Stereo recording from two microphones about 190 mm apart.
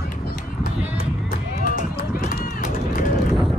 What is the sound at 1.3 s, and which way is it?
Run, 45° left (ahead or behind).